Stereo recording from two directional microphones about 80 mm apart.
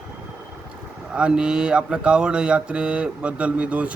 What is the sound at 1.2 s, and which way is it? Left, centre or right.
Mantra, centre.